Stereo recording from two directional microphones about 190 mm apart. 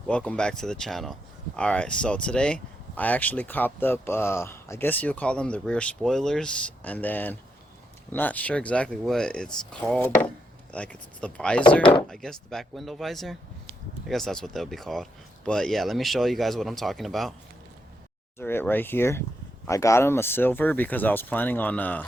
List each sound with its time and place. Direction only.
0.1 s speech: 5° left (ahead or behind)
11.8 s speech: 25° left (ahead or behind)
12.0 s speech: centre (ahead or behind)
18.3 s speech: 10° left (ahead or behind)